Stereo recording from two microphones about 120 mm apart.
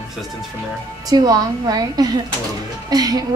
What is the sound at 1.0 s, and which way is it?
A woman's voice, 30° right (ahead or behind).